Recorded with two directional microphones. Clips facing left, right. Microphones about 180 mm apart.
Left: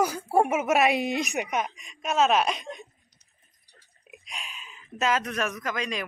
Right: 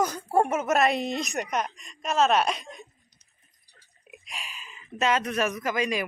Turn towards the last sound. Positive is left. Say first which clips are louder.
# right 4 dB
turn(degrees=-5)  # may be behind; listen again after turning